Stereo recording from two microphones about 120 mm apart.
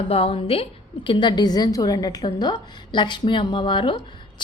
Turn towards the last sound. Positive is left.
turn(degrees=40)  # may be behind; listen again after turning